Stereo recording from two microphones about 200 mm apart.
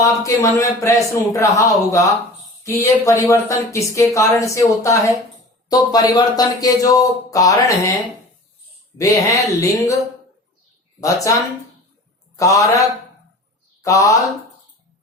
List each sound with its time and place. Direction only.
0.3 s speech: 15° left (ahead or behind)
9.0 s speech: 15° left (ahead or behind)
11.0 s speech: 15° left (ahead or behind)
12.4 s speech: 15° left (ahead or behind)